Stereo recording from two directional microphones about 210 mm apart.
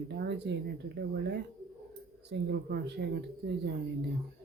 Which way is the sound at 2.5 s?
50° right (ahead or behind).